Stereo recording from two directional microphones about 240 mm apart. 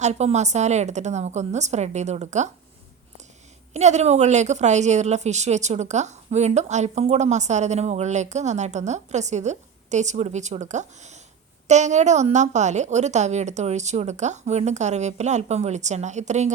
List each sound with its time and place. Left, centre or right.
0.0 s a woman's voice: right
3.7 s a woman's voice: right